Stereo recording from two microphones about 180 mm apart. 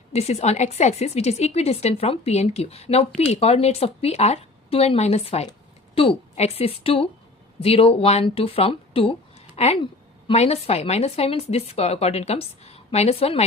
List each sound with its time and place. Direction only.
0.1 s a woman's voice: 35° left (ahead or behind)